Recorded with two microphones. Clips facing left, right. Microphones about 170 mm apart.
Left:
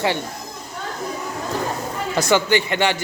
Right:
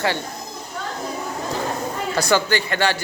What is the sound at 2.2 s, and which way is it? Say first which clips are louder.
Speech: left 2 dB; 20° left (ahead or behind).